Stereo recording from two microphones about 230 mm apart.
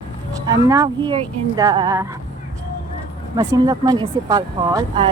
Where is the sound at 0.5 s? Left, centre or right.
Centre.